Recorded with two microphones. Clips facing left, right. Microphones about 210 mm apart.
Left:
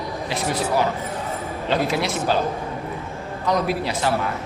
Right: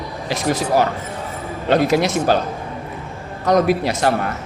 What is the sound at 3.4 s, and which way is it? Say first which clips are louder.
Speech: right 6 dB; 45° right (ahead or behind).